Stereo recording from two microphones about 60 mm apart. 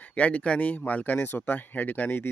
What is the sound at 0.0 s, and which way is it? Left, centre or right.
Speech, left.